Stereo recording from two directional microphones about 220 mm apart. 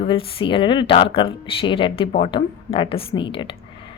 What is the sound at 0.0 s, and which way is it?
Speech, 25° left (ahead or behind).